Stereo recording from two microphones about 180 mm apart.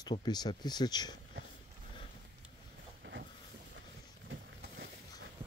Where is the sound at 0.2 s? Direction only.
25° left (ahead or behind).